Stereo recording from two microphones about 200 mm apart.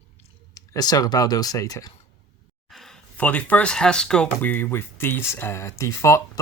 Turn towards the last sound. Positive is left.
turn(degrees=15)  # may be behind; listen again after turning